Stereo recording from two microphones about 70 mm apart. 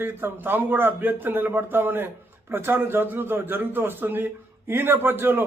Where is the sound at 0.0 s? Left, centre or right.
Right.